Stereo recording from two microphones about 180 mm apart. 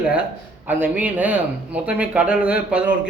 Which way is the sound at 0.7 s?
10° right (ahead or behind).